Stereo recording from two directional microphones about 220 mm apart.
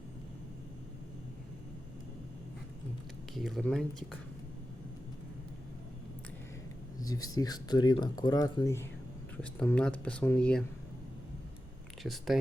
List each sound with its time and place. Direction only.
3.3 s speech: centre (ahead or behind)
7.0 s speech: 15° left (ahead or behind)
12.0 s speech: centre (ahead or behind)